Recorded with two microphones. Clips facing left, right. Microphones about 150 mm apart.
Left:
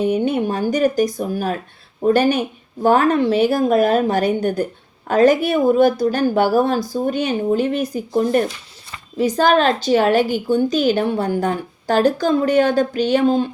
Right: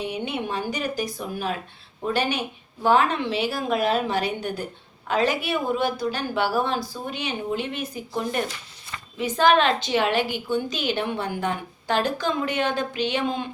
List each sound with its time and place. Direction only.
0.0 s a woman's voice: 45° left (ahead or behind)